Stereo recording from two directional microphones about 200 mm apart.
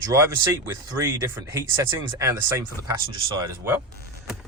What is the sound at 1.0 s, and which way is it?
Speech, 15° right (ahead or behind).